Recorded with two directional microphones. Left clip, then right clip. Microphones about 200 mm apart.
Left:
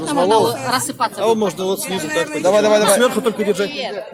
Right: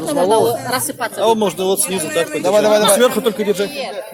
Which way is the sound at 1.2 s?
15° right (ahead or behind).